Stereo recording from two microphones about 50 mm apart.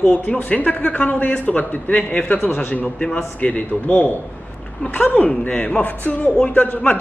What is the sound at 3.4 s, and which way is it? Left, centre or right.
Speech, left.